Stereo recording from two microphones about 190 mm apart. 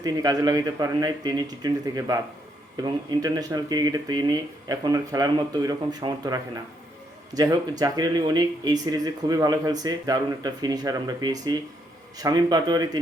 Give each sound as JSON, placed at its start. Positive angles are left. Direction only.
{"t": 0.0, "sound": "speech", "side_deg": -20}